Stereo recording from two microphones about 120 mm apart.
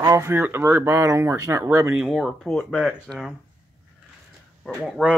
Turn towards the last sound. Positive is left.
turn(degrees=5)  # may be behind; listen again after turning